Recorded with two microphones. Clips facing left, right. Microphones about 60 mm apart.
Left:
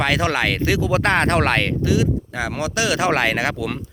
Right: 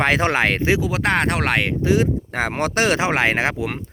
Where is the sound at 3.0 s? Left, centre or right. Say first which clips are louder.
Even; right.